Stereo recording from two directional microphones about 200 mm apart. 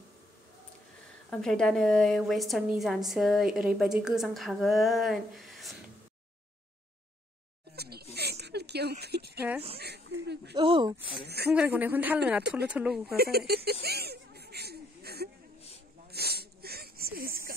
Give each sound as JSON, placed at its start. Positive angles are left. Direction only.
{"t": 1.3, "sound": "a woman's voice", "side_deg": 5}
{"t": 7.7, "sound": "a sound", "side_deg": -50}
{"t": 9.0, "sound": "speech", "side_deg": -55}
{"t": 9.8, "sound": "a sound", "side_deg": -55}
{"t": 10.5, "sound": "speech", "side_deg": -25}
{"t": 11.2, "sound": "a woman's voice", "side_deg": -55}
{"t": 11.5, "sound": "speech", "side_deg": -10}
{"t": 13.1, "sound": "speech", "side_deg": -50}
{"t": 13.7, "sound": "a sound", "side_deg": -50}